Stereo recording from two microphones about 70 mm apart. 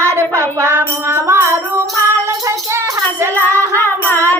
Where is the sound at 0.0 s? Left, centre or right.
Right.